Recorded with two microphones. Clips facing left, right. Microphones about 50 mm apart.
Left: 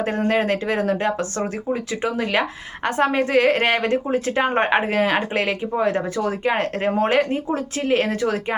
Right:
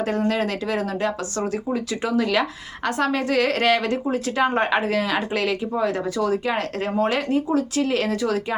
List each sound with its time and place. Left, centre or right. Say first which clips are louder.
0.0 s speech: left 2 dB; left